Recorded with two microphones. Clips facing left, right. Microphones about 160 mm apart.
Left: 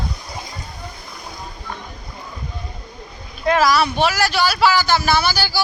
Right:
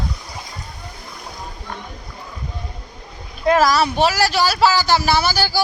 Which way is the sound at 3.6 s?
40° right (ahead or behind).